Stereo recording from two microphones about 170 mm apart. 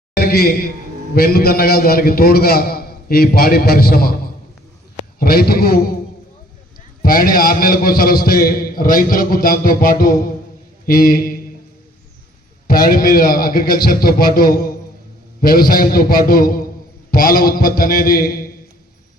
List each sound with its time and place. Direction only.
0.2 s a man's voice: 65° left (ahead or behind)
5.2 s a man's voice: 60° left (ahead or behind)
7.0 s a man's voice: 55° left (ahead or behind)
12.6 s a man's voice: 60° left (ahead or behind)